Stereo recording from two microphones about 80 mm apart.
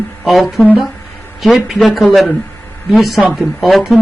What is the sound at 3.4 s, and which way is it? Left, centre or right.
Speech, centre.